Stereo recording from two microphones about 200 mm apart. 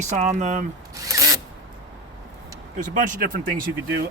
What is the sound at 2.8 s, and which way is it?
Speech, 40° right (ahead or behind).